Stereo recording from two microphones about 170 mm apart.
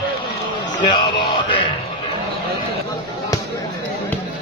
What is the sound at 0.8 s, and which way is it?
Music, 30° left (ahead or behind).